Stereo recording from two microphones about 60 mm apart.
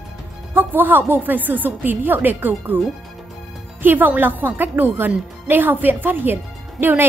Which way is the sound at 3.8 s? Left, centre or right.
Right.